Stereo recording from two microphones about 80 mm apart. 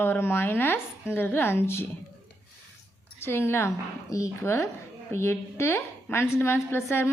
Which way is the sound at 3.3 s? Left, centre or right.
Left.